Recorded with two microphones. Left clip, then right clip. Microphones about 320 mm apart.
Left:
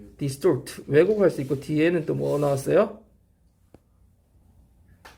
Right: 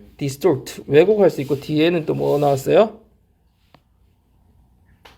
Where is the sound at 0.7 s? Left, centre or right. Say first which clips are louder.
Right 7 dB; centre.